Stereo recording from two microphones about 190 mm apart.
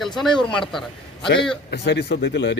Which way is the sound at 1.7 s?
65° left (ahead or behind).